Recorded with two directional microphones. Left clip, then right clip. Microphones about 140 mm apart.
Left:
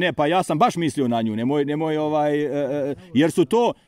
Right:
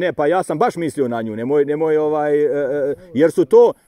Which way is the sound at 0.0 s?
20° left (ahead or behind).